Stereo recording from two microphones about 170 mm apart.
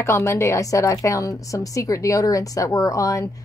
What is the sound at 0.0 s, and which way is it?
A woman's voice, 15° left (ahead or behind).